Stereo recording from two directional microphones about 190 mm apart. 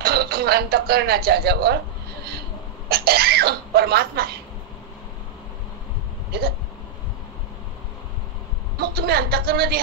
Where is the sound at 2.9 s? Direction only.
55° right (ahead or behind).